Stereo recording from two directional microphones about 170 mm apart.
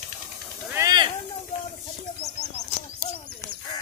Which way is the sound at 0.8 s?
25° right (ahead or behind).